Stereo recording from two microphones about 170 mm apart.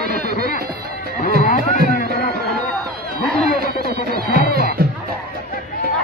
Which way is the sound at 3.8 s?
65° right (ahead or behind).